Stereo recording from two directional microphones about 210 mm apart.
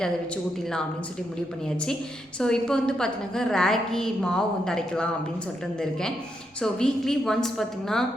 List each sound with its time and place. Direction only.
1.7 s a woman's voice: 5° left (ahead or behind)